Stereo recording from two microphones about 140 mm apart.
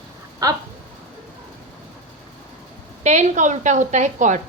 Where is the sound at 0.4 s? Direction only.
25° right (ahead or behind).